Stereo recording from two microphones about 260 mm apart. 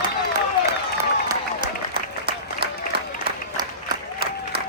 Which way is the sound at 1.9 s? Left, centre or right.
Right.